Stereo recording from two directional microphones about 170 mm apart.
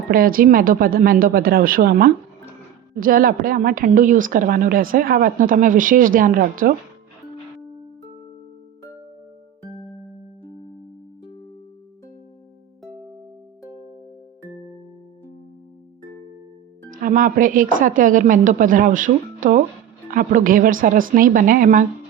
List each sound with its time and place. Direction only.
0.1 s a woman's voice: 55° right (ahead or behind)
16.9 s speech: 50° right (ahead or behind)